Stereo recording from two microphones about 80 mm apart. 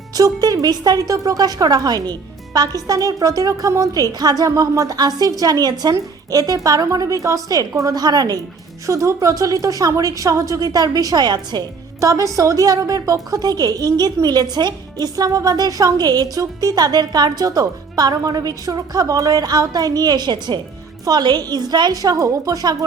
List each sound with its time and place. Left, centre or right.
0.2 s a woman's voice: right
8.9 s a woman's voice: right
11.9 s a woman's voice: right
22.1 s a woman's voice: right